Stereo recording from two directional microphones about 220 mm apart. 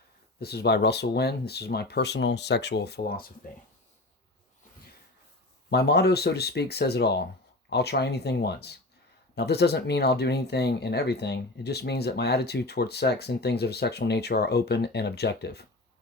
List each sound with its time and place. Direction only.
0.3 s speech: 45° left (ahead or behind)
5.7 s speech: 50° left (ahead or behind)